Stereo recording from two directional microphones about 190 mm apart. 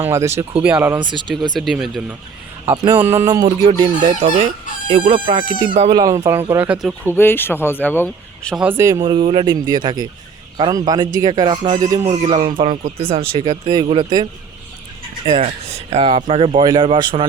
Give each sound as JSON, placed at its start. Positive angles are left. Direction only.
{"t": 0.1, "sound": "speech", "side_deg": -15}
{"t": 0.9, "sound": "speech", "side_deg": -25}
{"t": 1.5, "sound": "speech", "side_deg": 0}
{"t": 2.6, "sound": "speech", "side_deg": -20}
{"t": 4.1, "sound": "speech", "side_deg": -30}
{"t": 6.0, "sound": "speech", "side_deg": -15}
{"t": 7.0, "sound": "speech", "side_deg": 10}
{"t": 8.5, "sound": "speech", "side_deg": -10}
{"t": 9.0, "sound": "speech", "side_deg": -25}
{"t": 15.3, "sound": "speech", "side_deg": -30}